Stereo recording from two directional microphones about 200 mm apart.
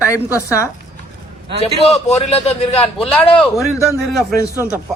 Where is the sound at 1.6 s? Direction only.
30° left (ahead or behind).